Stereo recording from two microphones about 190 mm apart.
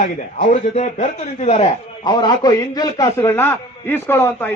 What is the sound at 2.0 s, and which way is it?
A man's voice, 20° left (ahead or behind).